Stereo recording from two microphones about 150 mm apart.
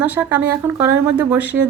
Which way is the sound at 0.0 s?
10° right (ahead or behind).